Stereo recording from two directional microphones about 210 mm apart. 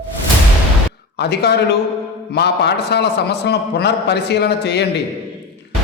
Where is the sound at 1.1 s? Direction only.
55° left (ahead or behind).